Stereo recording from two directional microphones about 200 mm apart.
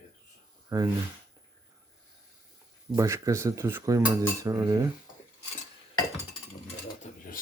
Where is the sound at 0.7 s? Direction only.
15° right (ahead or behind).